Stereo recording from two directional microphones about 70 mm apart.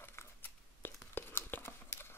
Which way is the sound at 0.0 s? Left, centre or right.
Left.